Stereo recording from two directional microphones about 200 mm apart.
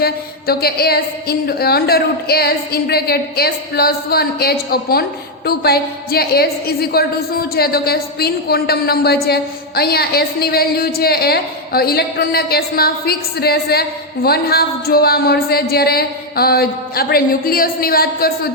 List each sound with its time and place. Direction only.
0.0 s a woman's voice: 50° left (ahead or behind)